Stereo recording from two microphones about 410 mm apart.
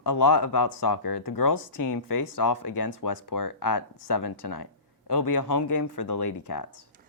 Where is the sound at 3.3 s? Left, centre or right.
Left.